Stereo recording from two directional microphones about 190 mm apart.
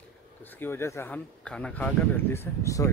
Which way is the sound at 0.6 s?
15° left (ahead or behind).